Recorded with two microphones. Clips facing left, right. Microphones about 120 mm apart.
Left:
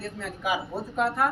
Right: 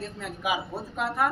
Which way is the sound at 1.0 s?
Centre (ahead or behind).